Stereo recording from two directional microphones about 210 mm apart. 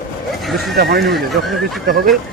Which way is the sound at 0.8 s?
50° right (ahead or behind).